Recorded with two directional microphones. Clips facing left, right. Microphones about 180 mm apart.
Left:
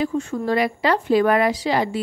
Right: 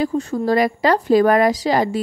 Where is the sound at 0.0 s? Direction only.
35° right (ahead or behind).